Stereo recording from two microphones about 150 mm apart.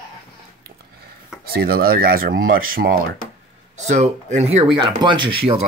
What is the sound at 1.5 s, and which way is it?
Speech, 90° right.